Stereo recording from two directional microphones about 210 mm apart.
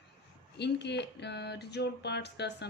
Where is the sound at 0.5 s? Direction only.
55° left (ahead or behind).